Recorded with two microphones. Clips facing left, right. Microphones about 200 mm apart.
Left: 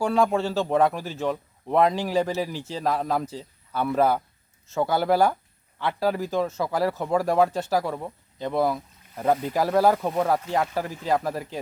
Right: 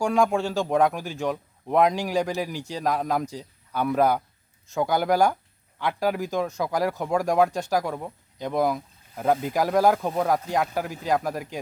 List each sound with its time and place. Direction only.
0.3 s speech: 10° right (ahead or behind)
0.7 s speech: centre (ahead or behind)
0.9 s speech: 10° right (ahead or behind)
2.1 s speech: 5° left (ahead or behind)
2.4 s speech: 10° right (ahead or behind)
5.8 s speech: 10° right (ahead or behind)
6.5 s speech: 5° left (ahead or behind)